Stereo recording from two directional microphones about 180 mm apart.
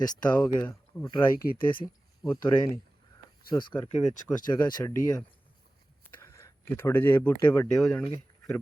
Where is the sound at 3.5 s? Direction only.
25° left (ahead or behind).